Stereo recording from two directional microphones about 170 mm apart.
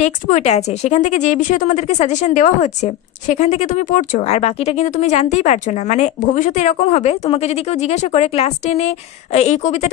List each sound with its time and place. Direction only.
0.0 s speech: 40° left (ahead or behind)